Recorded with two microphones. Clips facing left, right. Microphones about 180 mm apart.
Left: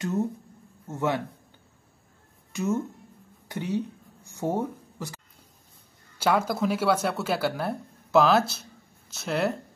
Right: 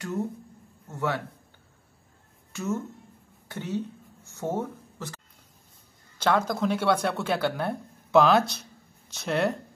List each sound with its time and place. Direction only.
0.8 s a man's voice: 20° left (ahead or behind)
2.5 s speech: 15° left (ahead or behind)
3.4 s a sound: 15° left (ahead or behind)
6.1 s speech: 10° left (ahead or behind)